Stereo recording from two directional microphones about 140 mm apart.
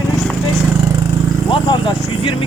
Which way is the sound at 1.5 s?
35° left (ahead or behind).